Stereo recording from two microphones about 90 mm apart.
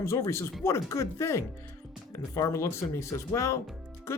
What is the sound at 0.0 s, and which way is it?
Speech, 30° left (ahead or behind).